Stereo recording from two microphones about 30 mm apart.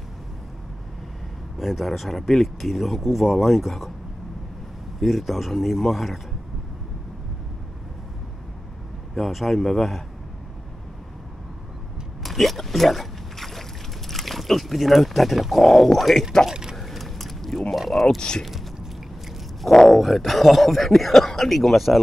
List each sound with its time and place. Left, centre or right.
1.6 s speech: centre
5.0 s speech: centre
9.3 s speech: centre
12.2 s boat: centre
15.5 s speech: centre
16.4 s a sound: centre
16.7 s a sound: centre
17.7 s speech: centre
18.0 s speech: left
19.6 s speech: centre